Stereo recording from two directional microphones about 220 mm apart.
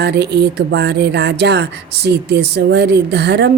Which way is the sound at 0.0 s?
50° right (ahead or behind).